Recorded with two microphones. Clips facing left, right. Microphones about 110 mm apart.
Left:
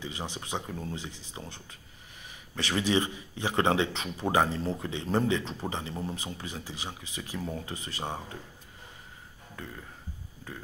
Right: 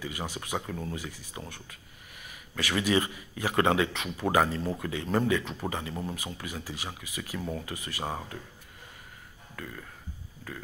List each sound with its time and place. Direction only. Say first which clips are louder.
0.0 s speech: right 1 dB; 25° left (ahead or behind)